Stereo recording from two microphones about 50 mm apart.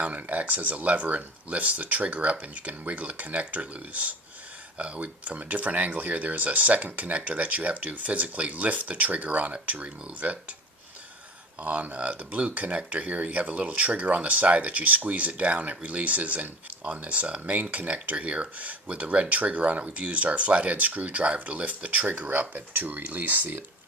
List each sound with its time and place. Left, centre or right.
0.0 s speech: right
11.6 s speech: right